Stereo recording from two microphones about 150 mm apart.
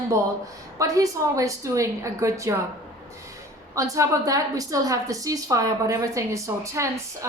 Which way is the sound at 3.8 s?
20° right (ahead or behind).